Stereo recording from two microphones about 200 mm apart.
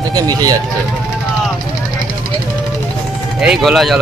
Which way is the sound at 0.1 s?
20° right (ahead or behind).